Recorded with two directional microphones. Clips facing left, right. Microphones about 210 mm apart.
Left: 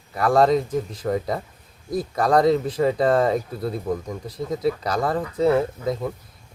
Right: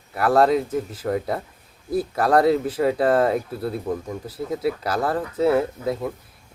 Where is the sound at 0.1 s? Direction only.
5° right (ahead or behind).